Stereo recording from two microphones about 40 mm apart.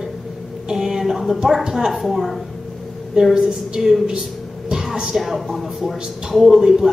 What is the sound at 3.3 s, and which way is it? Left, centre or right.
Speech, centre.